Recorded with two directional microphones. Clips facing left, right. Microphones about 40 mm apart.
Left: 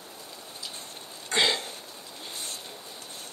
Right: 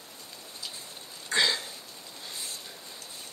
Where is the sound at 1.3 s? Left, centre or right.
Left.